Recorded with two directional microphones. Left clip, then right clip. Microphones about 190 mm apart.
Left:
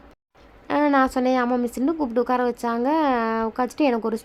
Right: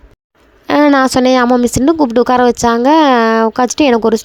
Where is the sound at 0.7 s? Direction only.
45° right (ahead or behind).